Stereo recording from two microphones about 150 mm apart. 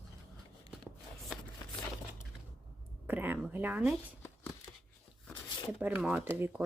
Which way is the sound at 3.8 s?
Centre (ahead or behind).